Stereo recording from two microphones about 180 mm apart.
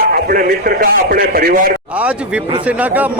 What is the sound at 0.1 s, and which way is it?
A man's voice, 55° right (ahead or behind).